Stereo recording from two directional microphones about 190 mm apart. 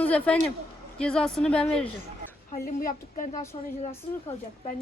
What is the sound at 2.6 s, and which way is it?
Speech, 45° left (ahead or behind).